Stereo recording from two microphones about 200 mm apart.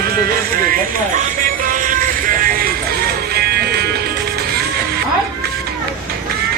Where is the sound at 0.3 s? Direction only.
45° right (ahead or behind).